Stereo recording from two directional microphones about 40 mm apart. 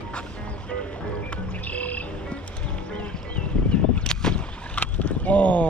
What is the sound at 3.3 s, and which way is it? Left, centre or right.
Whip, left.